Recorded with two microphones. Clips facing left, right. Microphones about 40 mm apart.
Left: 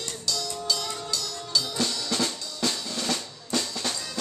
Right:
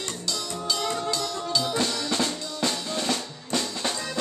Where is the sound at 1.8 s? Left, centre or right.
Centre.